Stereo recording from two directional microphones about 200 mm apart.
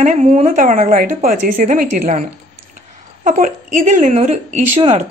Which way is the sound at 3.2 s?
40° right (ahead or behind).